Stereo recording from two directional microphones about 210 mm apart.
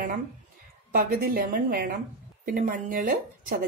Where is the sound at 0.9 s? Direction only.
45° right (ahead or behind).